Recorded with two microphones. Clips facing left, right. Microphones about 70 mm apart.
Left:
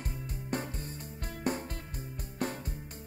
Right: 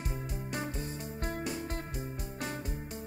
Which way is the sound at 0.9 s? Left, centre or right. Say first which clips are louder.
Right 6 dB; right.